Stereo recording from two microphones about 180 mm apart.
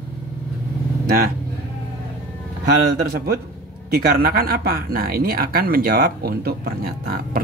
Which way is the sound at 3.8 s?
55° right (ahead or behind).